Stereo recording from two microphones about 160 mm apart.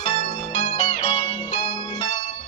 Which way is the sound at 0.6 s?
30° left (ahead or behind).